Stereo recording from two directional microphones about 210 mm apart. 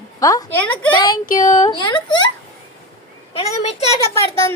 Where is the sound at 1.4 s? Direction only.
35° left (ahead or behind).